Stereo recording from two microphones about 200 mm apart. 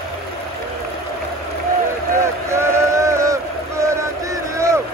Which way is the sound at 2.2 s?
15° right (ahead or behind).